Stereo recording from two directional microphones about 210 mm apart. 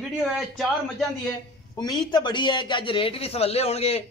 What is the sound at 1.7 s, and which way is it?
A woman's voice, 20° left (ahead or behind).